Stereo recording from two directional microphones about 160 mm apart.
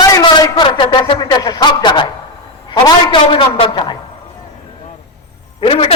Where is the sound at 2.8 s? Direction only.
30° left (ahead or behind).